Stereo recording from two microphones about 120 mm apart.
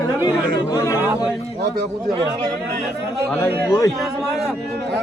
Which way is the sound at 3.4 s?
25° left (ahead or behind).